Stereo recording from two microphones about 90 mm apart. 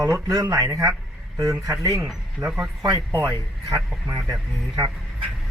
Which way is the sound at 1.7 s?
35° right (ahead or behind).